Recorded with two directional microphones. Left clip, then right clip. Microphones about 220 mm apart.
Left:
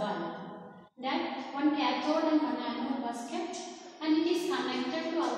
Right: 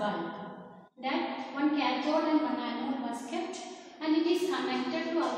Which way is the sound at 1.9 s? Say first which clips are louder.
Even; centre (ahead or behind).